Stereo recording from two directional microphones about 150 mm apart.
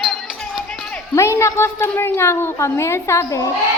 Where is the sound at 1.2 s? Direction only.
20° left (ahead or behind).